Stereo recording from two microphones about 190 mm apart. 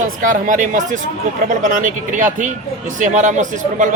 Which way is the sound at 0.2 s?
45° right (ahead or behind).